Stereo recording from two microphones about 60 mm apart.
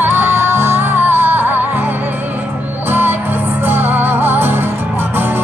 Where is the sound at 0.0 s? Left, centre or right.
Right.